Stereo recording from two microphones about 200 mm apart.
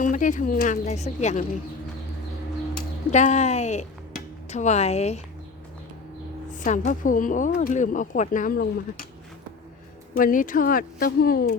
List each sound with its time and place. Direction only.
0.0 s speech: 40° left (ahead or behind)
2.7 s speech: 35° left (ahead or behind)
6.5 s speech: 40° left (ahead or behind)
10.2 s speech: 45° left (ahead or behind)